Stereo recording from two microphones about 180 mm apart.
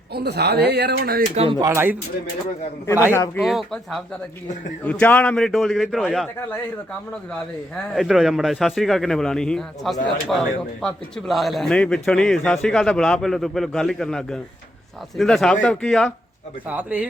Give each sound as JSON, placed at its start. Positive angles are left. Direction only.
{"t": 0.1, "sound": "speech", "side_deg": -65}
{"t": 1.4, "sound": "speech", "side_deg": -30}
{"t": 1.6, "sound": "speech", "side_deg": -10}
{"t": 3.1, "sound": "speech", "side_deg": 15}
{"t": 3.4, "sound": "a man's voice", "side_deg": 0}
{"t": 7.9, "sound": "a man's voice", "side_deg": 0}
{"t": 16.6, "sound": "speech", "side_deg": -10}